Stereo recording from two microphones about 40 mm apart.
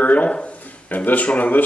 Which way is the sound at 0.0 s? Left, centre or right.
Left.